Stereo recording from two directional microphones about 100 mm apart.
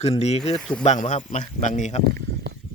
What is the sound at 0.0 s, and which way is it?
Speech, 90° left.